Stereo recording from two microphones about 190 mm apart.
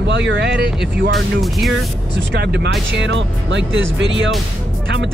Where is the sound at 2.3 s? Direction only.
60° right (ahead or behind); by 4.2 s 80° right.